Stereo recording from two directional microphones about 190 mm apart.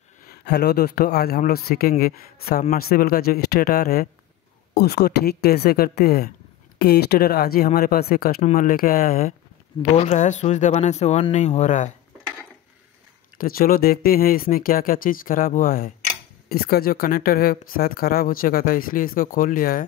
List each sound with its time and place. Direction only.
0.2 s a man's voice: 55° left (ahead or behind); by 11.9 s 40° left (ahead or behind)
13.4 s speech: 50° left (ahead or behind)